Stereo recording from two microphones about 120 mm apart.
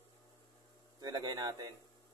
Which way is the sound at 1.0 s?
35° right (ahead or behind).